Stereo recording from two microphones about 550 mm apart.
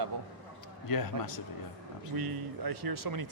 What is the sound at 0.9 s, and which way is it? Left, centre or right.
Speech, left.